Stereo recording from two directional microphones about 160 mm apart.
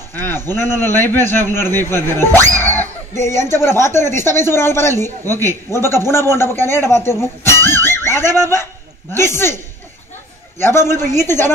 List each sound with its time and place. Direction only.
0.1 s a man's voice: 15° left (ahead or behind)
10.6 s a man's voice: 15° left (ahead or behind)